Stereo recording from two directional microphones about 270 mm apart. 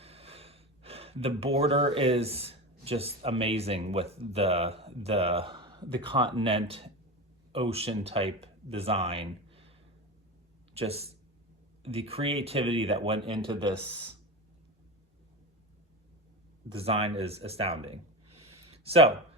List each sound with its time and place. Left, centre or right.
0.0 s a man's voice: right
10.8 s speech: right
16.6 s speech: right